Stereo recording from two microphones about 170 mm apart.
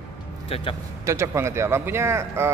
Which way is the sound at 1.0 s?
15° right (ahead or behind).